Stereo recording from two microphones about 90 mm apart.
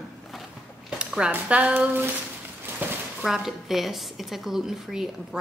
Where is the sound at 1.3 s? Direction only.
20° right (ahead or behind).